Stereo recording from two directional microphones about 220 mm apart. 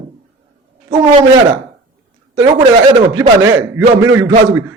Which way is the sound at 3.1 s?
10° right (ahead or behind).